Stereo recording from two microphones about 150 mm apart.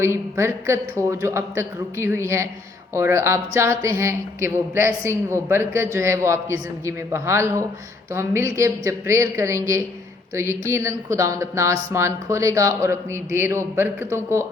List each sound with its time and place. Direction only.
0.0 s a woman's voice: 20° right (ahead or behind)